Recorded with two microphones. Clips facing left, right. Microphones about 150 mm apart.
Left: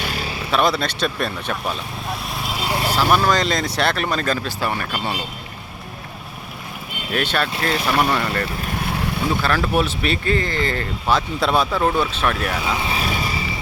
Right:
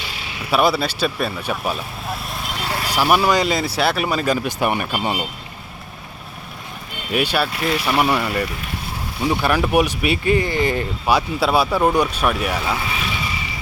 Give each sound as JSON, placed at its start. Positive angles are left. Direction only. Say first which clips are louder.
{"t": 0.0, "sound": "vehicle", "louder": "left 6 dB", "side_deg": 45}
{"t": 0.5, "sound": "speech", "louder": "right 2 dB", "side_deg": -10}
{"t": 2.6, "sound": "a sound", "louder": "left 2 dB", "side_deg": 15}
{"t": 2.9, "sound": "speech", "louder": "right 2 dB", "side_deg": -10}
{"t": 7.1, "sound": "speech", "louder": "right 2 dB", "side_deg": -10}
{"t": 8.8, "sound": "vehicle", "louder": "left 6 dB", "side_deg": 75}
{"t": 9.4, "sound": "speech", "louder": "right 4 dB", "side_deg": -15}
{"t": 12.9, "sound": "a sound", "louder": "left 3 dB", "side_deg": 35}